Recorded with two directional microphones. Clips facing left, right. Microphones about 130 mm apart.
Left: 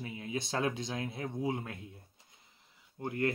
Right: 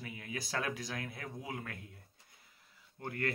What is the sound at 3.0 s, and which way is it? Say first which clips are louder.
Speech: left 5 dB; 20° left (ahead or behind).